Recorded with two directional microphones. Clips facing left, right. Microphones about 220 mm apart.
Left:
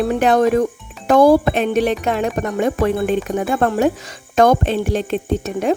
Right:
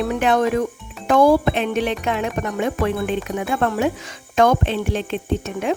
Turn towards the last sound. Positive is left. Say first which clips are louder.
# left 3 dB
turn(degrees=40)  # may be behind; listen again after turning